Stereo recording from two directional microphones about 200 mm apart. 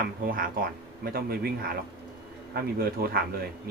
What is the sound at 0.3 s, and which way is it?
Speech, 45° right (ahead or behind).